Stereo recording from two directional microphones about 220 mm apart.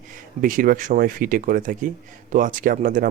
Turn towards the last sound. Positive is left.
turn(degrees=-35)  # may be behind; listen again after turning